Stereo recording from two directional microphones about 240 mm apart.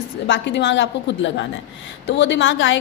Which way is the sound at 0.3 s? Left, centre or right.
Left.